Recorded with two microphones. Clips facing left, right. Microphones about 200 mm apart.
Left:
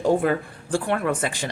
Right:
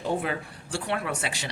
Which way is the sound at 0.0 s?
50° left (ahead or behind).